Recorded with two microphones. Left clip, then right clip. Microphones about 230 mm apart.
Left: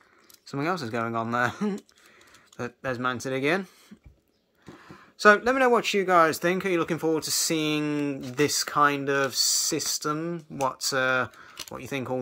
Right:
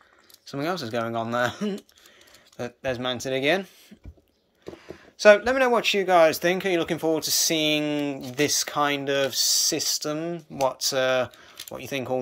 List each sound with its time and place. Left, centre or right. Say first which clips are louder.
0.5 s speech: even; left
4.7 s speech: right 2 dB; left